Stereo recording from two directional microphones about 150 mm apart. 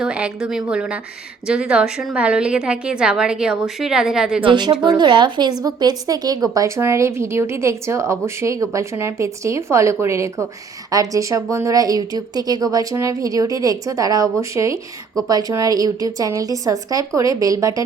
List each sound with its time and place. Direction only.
0.0 s a woman's voice: 5° right (ahead or behind)
4.4 s a woman's voice: 30° right (ahead or behind)